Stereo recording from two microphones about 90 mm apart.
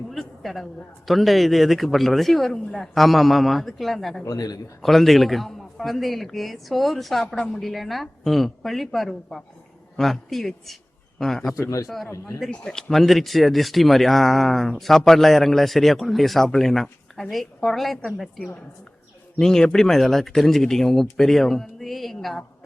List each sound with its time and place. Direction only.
0.1 s speech: centre (ahead or behind)
4.3 s a man's voice: 45° left (ahead or behind)
4.8 s speech: centre (ahead or behind)
12.0 s speech: 35° left (ahead or behind)
12.4 s speech: 5° left (ahead or behind)